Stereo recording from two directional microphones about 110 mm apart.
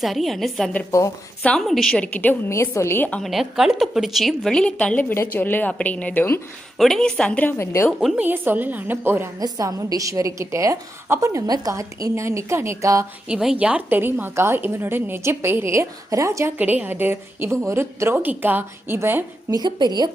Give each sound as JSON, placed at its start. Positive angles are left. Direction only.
{"t": 0.0, "sound": "a woman's voice", "side_deg": 0}
{"t": 0.9, "sound": "a woman's voice", "side_deg": 30}
{"t": 1.4, "sound": "a woman's voice", "side_deg": 10}
{"t": 2.5, "sound": "a woman's voice", "side_deg": 25}
{"t": 3.2, "sound": "a woman's voice", "side_deg": 0}
{"t": 5.1, "sound": "a woman's voice", "side_deg": 20}
{"t": 6.7, "sound": "a woman's voice", "side_deg": 5}
{"t": 8.1, "sound": "a woman's voice", "side_deg": -15}
{"t": 9.4, "sound": "a woman's voice", "side_deg": -35}
{"t": 13.2, "sound": "a woman's voice", "side_deg": -5}
{"t": 16.6, "sound": "a woman's voice", "side_deg": -15}
{"t": 19.5, "sound": "a woman's voice", "side_deg": -40}